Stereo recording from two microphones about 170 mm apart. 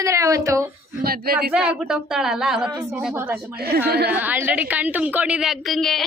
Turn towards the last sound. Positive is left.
turn(degrees=0)  # may be behind; listen again after turning